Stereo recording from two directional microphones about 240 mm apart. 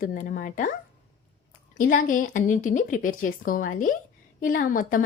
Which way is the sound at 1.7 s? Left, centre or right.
Left.